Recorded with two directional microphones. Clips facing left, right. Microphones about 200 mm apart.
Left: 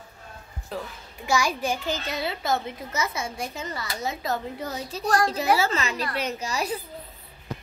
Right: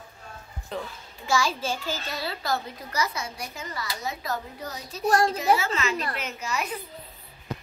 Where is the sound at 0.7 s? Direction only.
5° left (ahead or behind).